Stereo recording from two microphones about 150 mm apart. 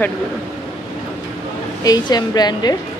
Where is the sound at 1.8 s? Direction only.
25° left (ahead or behind).